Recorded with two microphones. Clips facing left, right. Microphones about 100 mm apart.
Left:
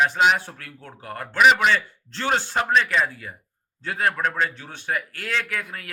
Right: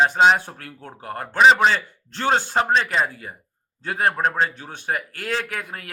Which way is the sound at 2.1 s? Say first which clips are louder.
Right 3 dB; 45° right (ahead or behind).